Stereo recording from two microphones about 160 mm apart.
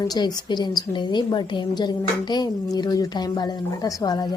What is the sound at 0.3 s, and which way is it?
Speech, 25° left (ahead or behind).